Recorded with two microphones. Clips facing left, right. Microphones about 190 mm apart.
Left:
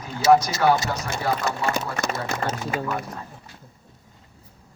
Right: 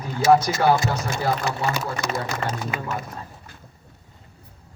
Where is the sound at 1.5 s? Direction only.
50° left (ahead or behind).